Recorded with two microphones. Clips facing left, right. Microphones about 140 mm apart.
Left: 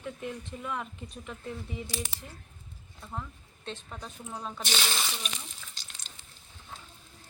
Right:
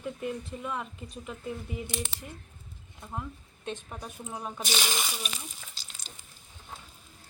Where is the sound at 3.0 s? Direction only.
15° right (ahead or behind).